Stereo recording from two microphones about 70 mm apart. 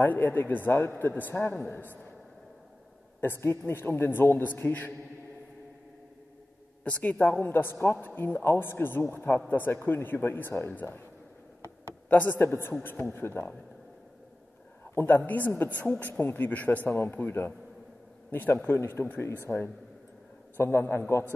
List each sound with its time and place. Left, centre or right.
0.0 s speech: left
3.2 s a woman's voice: left
6.8 s a woman's voice: left
12.1 s speech: left
15.0 s a woman's voice: left